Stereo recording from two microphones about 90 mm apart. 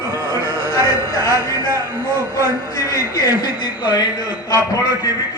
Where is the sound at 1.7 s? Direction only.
30° right (ahead or behind).